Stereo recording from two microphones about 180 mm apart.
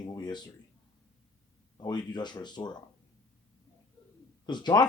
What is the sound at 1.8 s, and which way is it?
Speech, 25° left (ahead or behind).